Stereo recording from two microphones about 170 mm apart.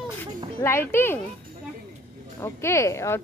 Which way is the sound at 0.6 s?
15° left (ahead or behind).